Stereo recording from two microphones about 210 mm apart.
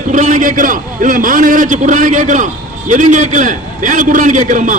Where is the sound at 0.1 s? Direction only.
35° right (ahead or behind).